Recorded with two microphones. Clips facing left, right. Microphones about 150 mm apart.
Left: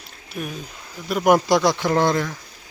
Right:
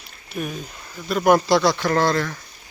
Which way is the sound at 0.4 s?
Centre (ahead or behind).